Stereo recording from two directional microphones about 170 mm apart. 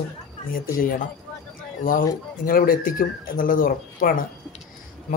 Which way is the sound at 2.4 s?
55° left (ahead or behind).